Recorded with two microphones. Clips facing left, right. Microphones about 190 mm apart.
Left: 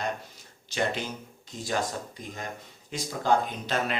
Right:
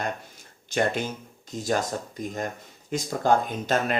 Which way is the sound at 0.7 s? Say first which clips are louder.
Right 4 dB; 50° right (ahead or behind).